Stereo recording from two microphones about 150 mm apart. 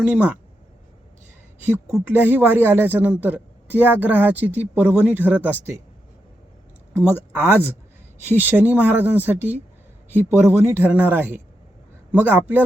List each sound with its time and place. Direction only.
0.0 s speech: 10° right (ahead or behind)
2.1 s speech: 15° right (ahead or behind)
7.3 s speech: 15° right (ahead or behind)